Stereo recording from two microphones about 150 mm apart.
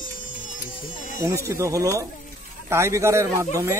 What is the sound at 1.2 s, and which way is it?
Speech, 20° right (ahead or behind).